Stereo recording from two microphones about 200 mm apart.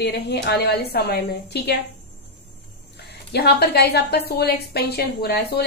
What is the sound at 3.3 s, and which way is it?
A woman's voice, 55° left (ahead or behind).